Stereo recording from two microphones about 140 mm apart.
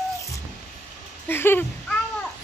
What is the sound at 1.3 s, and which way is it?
Speech, 15° left (ahead or behind).